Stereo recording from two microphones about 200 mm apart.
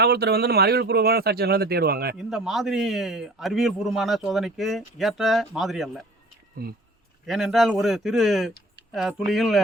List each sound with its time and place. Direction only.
0.0 s speech: 50° right (ahead or behind)
2.1 s a man's voice: centre (ahead or behind)
7.3 s a man's voice: centre (ahead or behind)